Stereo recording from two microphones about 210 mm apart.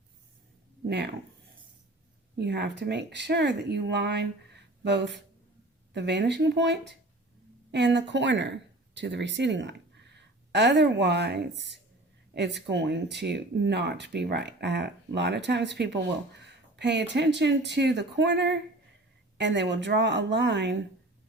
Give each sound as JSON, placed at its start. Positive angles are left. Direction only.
{"t": 0.9, "sound": "speech", "side_deg": -50}
{"t": 2.4, "sound": "speech", "side_deg": -55}